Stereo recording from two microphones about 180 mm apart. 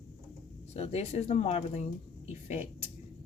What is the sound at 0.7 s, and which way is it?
A woman's voice, 35° left (ahead or behind).